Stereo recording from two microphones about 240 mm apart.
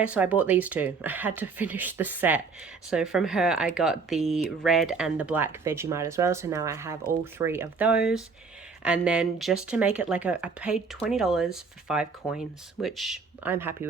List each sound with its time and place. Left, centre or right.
0.0 s speech: centre